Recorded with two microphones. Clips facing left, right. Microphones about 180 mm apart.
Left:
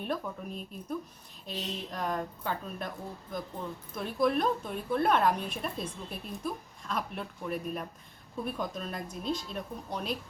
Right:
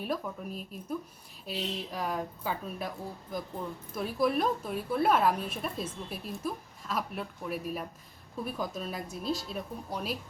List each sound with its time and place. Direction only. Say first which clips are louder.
0.0 s a woman's voice: even; 5° right (ahead or behind)
3.9 s a woman's voice: even; 5° right (ahead or behind)